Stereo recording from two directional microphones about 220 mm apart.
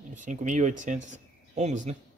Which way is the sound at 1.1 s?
30° right (ahead or behind).